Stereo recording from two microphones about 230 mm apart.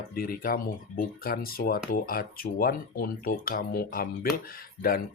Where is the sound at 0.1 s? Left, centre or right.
Left.